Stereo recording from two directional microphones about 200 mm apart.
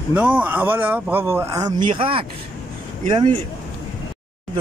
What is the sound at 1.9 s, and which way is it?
Speech, 25° right (ahead or behind).